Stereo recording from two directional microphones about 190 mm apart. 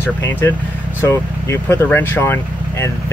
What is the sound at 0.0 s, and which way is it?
Speech, 10° left (ahead or behind).